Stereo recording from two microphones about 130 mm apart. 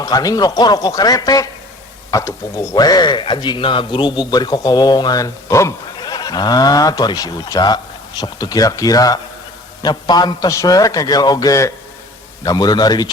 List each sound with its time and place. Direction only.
0.0 s a man's voice: 30° left (ahead or behind)